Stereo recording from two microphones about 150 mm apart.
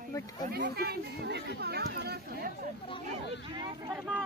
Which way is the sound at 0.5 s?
90° right.